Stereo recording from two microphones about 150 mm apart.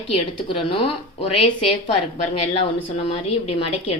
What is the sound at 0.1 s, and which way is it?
Speech, 35° left (ahead or behind).